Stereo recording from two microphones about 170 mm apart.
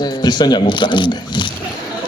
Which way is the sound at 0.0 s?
25° left (ahead or behind).